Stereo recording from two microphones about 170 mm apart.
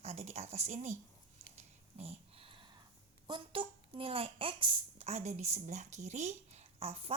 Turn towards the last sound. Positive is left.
turn(degrees=-35)  # may be behind; listen again after turning